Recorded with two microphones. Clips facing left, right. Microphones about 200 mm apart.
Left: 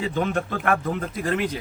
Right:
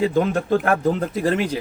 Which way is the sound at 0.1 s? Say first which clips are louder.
Right 6 dB; 40° right (ahead or behind).